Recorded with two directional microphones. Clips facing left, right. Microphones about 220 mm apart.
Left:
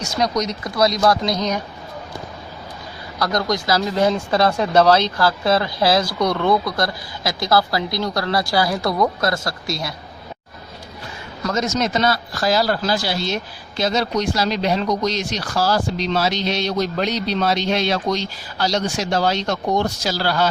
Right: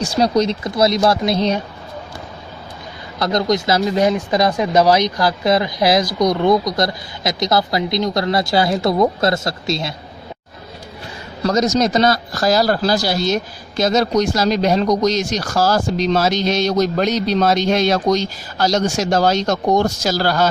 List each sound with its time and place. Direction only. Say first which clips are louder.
0.0 s speech: right 5 dB; 30° right (ahead or behind)
3.2 s speech: right 4 dB; 20° right (ahead or behind)
11.4 s speech: right 5 dB; 35° right (ahead or behind)